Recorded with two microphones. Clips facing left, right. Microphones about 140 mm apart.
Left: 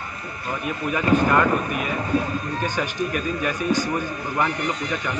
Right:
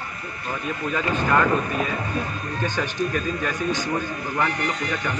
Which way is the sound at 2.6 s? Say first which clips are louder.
Right 2 dB; 15° left (ahead or behind).